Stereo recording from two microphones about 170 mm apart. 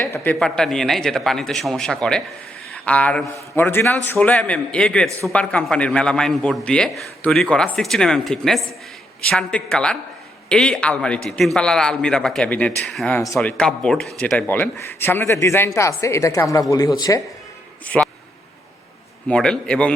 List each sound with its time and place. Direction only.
0.1 s a man's voice: 10° left (ahead or behind)
17.8 s speech: 10° left (ahead or behind)
19.3 s a man's voice: 5° left (ahead or behind)